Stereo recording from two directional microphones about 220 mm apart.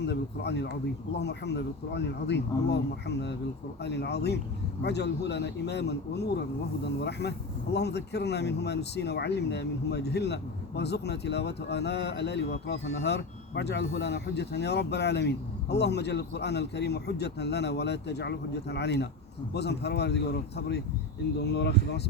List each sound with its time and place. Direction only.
0.0 s speech: 50° left (ahead or behind)